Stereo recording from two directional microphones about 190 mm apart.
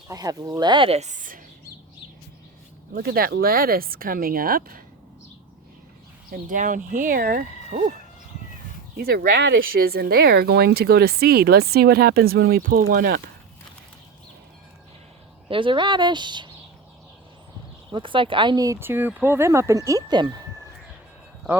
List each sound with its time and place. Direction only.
0.1 s speech: 20° right (ahead or behind); by 1.4 s 45° right (ahead or behind)
2.9 s speech: 55° right (ahead or behind)
6.5 s speech: 45° right (ahead or behind)
9.0 s speech: 55° right (ahead or behind)
15.4 s speech: 25° right (ahead or behind)
17.9 s speech: 25° right (ahead or behind)